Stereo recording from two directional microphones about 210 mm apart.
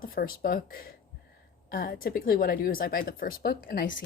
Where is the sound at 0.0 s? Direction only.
45° left (ahead or behind).